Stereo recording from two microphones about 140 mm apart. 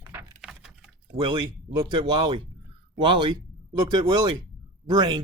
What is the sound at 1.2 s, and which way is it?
Speech, 40° right (ahead or behind).